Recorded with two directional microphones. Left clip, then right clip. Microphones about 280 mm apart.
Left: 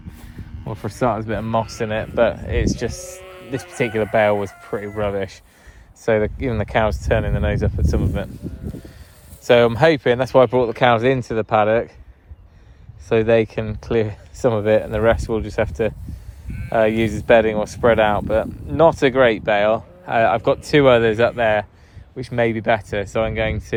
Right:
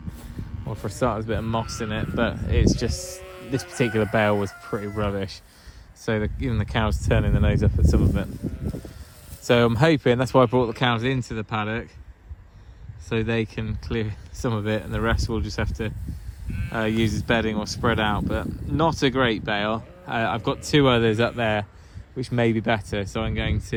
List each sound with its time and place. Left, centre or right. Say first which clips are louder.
0.8 s speech: left 5 dB; right
3.0 s music: left 2 dB; right
3.8 s speech: left 5 dB; right
8.4 s snake: right 1 dB; right
9.4 s speech: left 6 dB; centre
13.1 s speech: left 10 dB; centre